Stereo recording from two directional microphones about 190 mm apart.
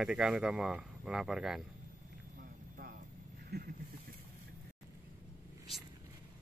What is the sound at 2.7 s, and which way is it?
Vehicle, 50° right (ahead or behind).